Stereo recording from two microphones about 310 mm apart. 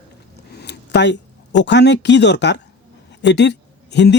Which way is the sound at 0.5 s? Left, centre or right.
Left.